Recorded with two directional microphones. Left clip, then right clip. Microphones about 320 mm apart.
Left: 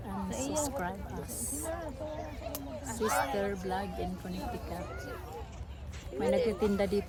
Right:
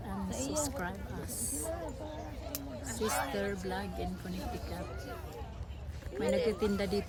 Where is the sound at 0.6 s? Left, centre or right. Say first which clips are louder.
Left 3 dB; centre.